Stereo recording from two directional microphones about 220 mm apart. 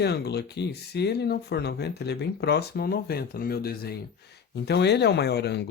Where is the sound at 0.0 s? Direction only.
50° left (ahead or behind).